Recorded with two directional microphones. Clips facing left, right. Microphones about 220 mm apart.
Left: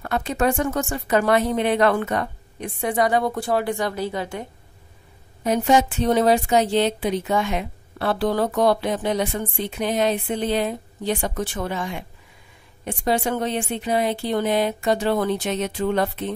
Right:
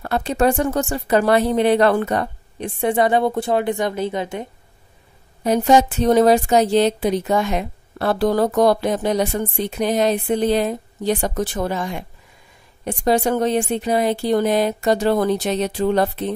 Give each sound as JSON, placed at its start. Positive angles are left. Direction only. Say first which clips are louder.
{"t": 0.0, "sound": "speech", "louder": "right 4 dB", "side_deg": -35}
{"t": 5.4, "sound": "speech", "louder": "right 3 dB", "side_deg": -35}